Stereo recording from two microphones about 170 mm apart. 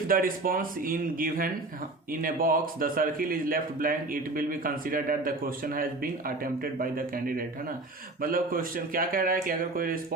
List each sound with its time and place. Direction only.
0.1 s a man's voice: 55° right (ahead or behind)